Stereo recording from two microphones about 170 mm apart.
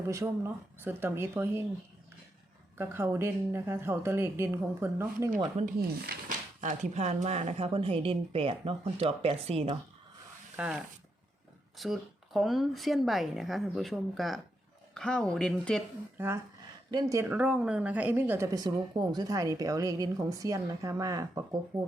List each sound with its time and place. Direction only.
0.1 s speech: 15° right (ahead or behind)
2.7 s speech: 15° right (ahead or behind)
6.1 s speech: 50° right (ahead or behind); by 9.7 s 35° right (ahead or behind)
10.6 s speech: 5° right (ahead or behind)
16.1 s a woman's voice: 15° right (ahead or behind)